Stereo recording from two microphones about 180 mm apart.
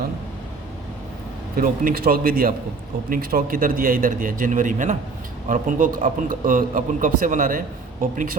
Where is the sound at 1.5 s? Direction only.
55° right (ahead or behind).